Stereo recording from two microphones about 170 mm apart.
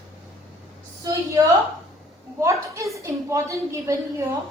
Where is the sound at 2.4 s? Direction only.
20° right (ahead or behind).